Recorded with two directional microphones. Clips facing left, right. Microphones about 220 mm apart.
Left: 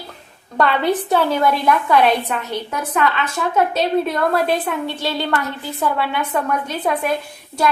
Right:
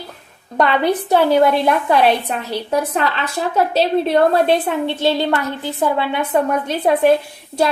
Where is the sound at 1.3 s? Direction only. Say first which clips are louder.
Right 4 dB; 30° right (ahead or behind).